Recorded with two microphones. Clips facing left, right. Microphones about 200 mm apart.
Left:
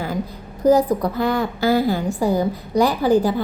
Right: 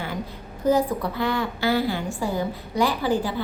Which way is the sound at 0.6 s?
40° left (ahead or behind).